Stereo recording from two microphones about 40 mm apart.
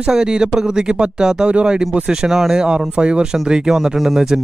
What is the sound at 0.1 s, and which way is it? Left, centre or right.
Speech, centre.